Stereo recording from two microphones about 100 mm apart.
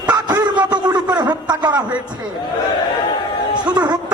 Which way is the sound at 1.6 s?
45° right (ahead or behind).